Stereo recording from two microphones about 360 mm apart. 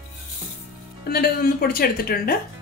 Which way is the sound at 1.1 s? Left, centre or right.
Left.